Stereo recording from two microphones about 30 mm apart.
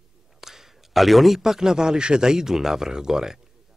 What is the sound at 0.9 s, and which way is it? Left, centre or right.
Speech, centre.